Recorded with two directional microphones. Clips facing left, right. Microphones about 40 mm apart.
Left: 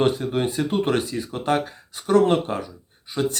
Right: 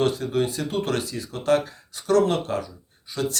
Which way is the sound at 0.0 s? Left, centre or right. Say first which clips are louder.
Left 1 dB; left.